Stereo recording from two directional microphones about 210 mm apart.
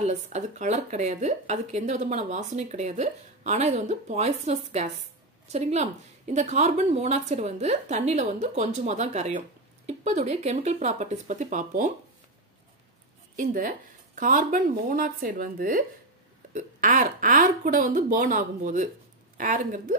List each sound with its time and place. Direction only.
0.0 s speech: 35° right (ahead or behind)
13.4 s speech: 40° right (ahead or behind)